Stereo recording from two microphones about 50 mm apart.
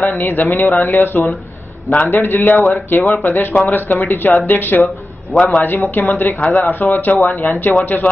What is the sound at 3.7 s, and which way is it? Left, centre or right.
Speech, left.